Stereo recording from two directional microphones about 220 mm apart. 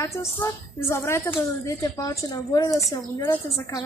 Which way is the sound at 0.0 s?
10° left (ahead or behind).